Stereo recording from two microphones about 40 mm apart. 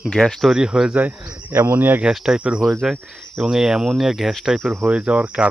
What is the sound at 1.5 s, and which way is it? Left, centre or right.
Speech, right.